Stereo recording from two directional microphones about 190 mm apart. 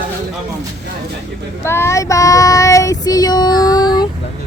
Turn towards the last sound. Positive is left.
turn(degrees=20)  # may be behind; listen again after turning